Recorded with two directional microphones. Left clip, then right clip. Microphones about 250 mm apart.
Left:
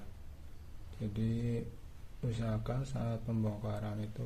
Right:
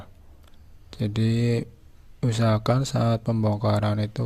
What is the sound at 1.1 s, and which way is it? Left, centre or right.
Speech, right.